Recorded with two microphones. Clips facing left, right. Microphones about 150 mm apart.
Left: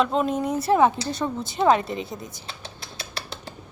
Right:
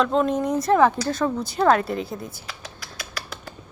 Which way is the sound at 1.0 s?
50° right (ahead or behind).